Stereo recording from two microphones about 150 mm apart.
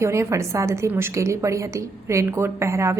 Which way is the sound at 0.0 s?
20° right (ahead or behind).